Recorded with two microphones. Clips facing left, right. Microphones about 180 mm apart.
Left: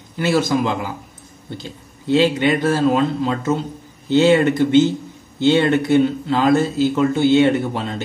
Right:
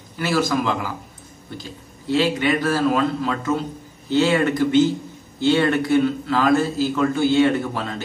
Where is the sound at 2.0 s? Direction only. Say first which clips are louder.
Left 4 dB; 25° left (ahead or behind).